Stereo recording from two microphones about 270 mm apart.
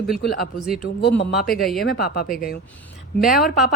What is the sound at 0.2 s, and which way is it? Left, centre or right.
Speech, left.